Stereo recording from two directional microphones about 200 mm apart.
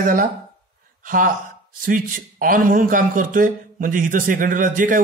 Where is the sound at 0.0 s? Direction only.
40° right (ahead or behind).